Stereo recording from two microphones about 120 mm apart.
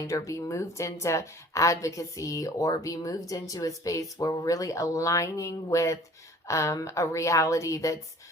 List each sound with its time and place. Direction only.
0.0 s a woman's voice: 25° left (ahead or behind)